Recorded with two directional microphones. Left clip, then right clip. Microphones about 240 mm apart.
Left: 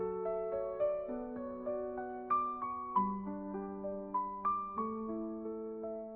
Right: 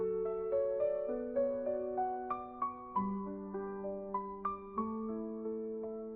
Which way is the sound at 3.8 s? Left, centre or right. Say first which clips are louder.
Even; right.